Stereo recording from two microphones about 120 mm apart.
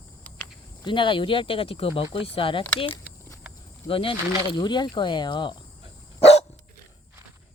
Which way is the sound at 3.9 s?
45° left (ahead or behind).